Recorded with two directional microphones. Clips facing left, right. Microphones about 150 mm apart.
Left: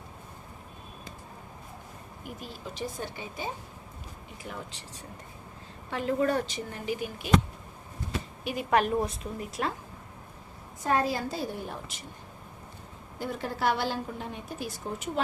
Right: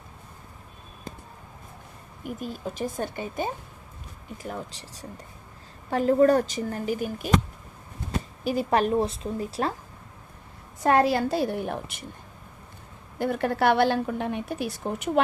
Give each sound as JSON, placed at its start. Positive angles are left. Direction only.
{"t": 2.2, "sound": "a woman's voice", "side_deg": -50}
{"t": 4.4, "sound": "speech", "side_deg": -40}
{"t": 10.8, "sound": "a woman's voice", "side_deg": -75}
{"t": 13.1, "sound": "a woman's voice", "side_deg": -65}